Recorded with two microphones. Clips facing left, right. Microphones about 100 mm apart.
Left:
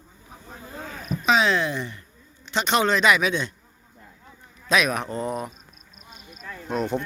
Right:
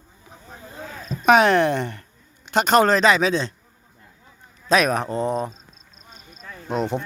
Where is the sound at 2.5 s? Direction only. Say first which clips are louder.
Right 5 dB; 45° right (ahead or behind).